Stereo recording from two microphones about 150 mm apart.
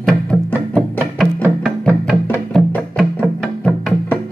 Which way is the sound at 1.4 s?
10° right (ahead or behind).